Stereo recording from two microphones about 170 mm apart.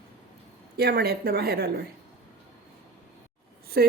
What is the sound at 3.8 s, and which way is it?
Speech, 65° right (ahead or behind).